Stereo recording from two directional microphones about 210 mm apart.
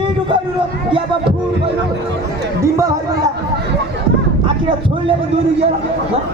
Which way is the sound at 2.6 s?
15° right (ahead or behind).